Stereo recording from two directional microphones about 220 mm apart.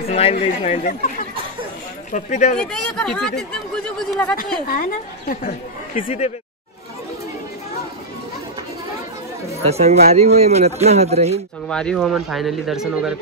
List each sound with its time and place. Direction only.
0.1 s speech: 25° left (ahead or behind)
2.1 s speech: 35° left (ahead or behind)
2.6 s speech: 5° left (ahead or behind)
4.6 s speech: 40° left (ahead or behind)
5.9 s speech: 25° left (ahead or behind)
9.6 s a man's voice: 30° right (ahead or behind)
11.6 s speech: 5° left (ahead or behind)